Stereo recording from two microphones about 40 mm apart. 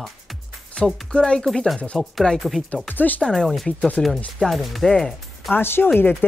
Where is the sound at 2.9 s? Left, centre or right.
Left.